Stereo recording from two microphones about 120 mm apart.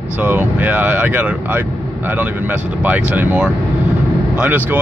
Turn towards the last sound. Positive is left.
turn(degrees=-10)  # may be behind; listen again after turning